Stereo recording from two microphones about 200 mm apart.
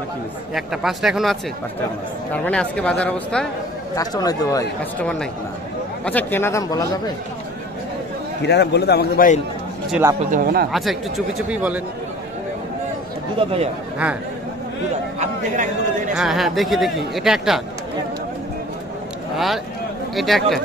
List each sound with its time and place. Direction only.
0.6 s a man's voice: centre (ahead or behind)
3.9 s a man's voice: 20° left (ahead or behind)
8.4 s a man's voice: 55° left (ahead or behind)
9.8 s speech: 5° right (ahead or behind)
10.3 s speech: 50° right (ahead or behind)
10.7 s a man's voice: centre (ahead or behind)
15.1 s speech: 40° right (ahead or behind)
16.2 s a man's voice: centre (ahead or behind)
19.3 s a man's voice: centre (ahead or behind)